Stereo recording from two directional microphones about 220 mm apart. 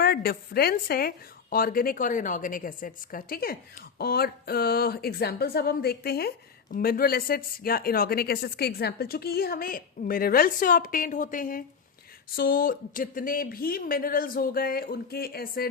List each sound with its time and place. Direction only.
0.0 s a woman's voice: 45° left (ahead or behind)